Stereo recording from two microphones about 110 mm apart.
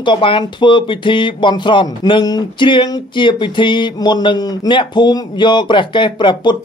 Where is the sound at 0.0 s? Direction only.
50° left (ahead or behind).